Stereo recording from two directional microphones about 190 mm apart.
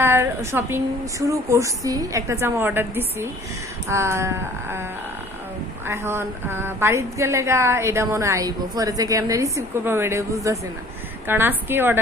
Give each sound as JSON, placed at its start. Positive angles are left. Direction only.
{"t": 0.0, "sound": "a woman's voice", "side_deg": -10}